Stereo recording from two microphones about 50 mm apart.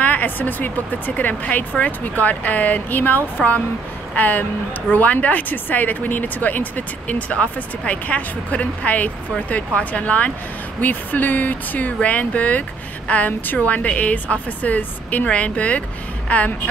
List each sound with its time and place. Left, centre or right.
0.0 s a woman's voice: left